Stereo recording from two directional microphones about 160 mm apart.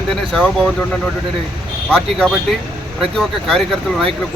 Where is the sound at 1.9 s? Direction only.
5° left (ahead or behind).